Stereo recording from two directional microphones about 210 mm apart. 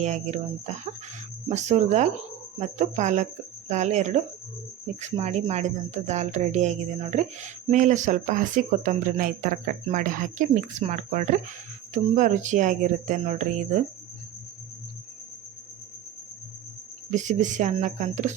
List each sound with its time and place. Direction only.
0.0 s speech: 35° right (ahead or behind)
17.1 s speech: 35° right (ahead or behind)